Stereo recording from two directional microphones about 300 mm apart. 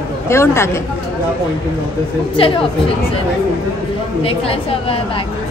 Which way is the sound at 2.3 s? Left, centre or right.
Centre.